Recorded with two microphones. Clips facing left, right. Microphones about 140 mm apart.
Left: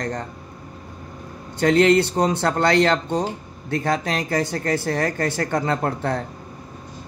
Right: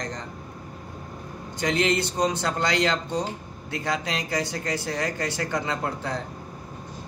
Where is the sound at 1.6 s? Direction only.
55° left (ahead or behind).